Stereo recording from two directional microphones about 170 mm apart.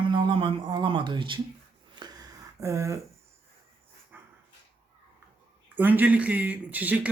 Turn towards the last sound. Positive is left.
turn(degrees=-10)  # may be behind; listen again after turning